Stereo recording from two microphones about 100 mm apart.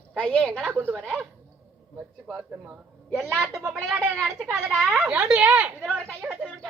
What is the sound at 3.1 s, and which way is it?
A woman's voice, 5° right (ahead or behind).